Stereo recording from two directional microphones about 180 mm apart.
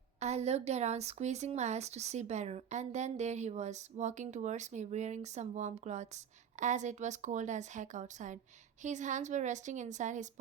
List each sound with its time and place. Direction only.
0.2 s a woman's voice: 40° right (ahead or behind)